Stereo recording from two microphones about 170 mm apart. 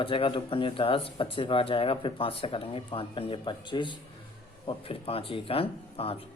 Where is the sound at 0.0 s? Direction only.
30° left (ahead or behind).